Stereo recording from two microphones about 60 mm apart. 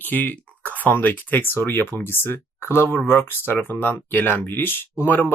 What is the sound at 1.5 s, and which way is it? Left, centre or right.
Speech, left.